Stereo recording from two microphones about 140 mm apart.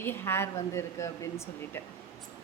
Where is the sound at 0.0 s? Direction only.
15° left (ahead or behind).